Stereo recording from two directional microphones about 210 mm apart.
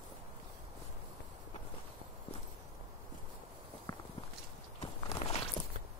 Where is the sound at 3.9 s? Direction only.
20° left (ahead or behind).